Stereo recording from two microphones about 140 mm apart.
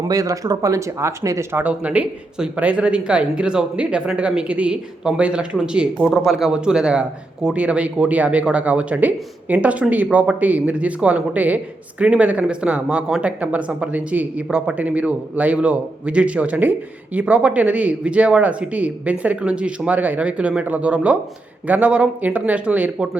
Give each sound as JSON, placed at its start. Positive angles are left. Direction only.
{"t": 0.0, "sound": "speech", "side_deg": -25}